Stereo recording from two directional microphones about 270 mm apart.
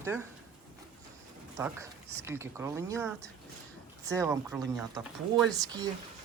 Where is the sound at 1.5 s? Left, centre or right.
Centre.